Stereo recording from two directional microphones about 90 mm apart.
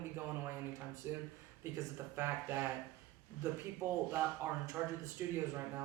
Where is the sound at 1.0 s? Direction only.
25° right (ahead or behind).